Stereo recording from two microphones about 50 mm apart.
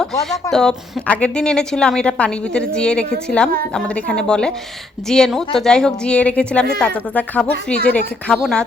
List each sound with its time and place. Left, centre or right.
0.5 s a woman's voice: centre
1.0 s a woman's voice: left
1.4 s a woman's voice: centre
6.1 s a woman's voice: left
8.3 s a woman's voice: centre